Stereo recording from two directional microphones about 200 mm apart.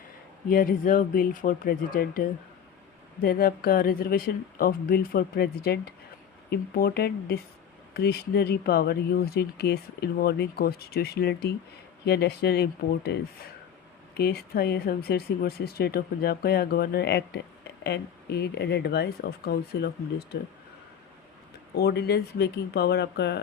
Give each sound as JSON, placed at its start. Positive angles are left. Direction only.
{"t": 0.4, "sound": "speech", "side_deg": 45}
{"t": 21.8, "sound": "speech", "side_deg": 55}